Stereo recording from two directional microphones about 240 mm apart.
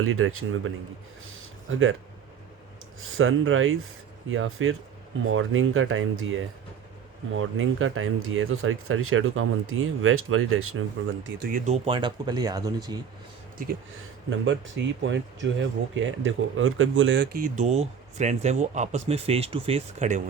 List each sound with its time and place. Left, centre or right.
0.0 s speech: right
1.2 s a sound: right
3.0 s speech: right
11.4 s speech: right; by 13.0 s centre
14.3 s speech: right